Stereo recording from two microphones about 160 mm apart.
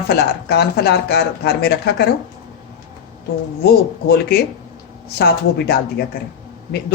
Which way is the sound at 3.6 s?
85° left.